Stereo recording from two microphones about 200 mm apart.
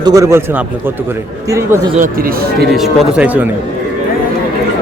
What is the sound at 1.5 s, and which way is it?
Speech, 15° right (ahead or behind).